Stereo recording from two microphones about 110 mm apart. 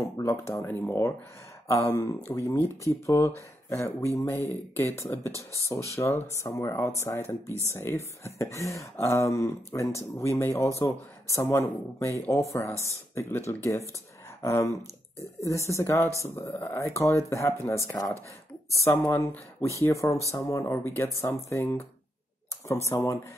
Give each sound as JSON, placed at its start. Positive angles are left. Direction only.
{"t": 0.2, "sound": "speech", "side_deg": 30}
{"t": 22.8, "sound": "speech", "side_deg": 25}